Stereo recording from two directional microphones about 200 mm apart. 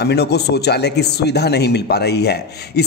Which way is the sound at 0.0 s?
55° left (ahead or behind).